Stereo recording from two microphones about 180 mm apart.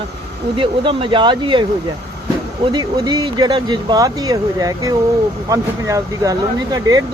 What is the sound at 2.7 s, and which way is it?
Speech, 25° right (ahead or behind).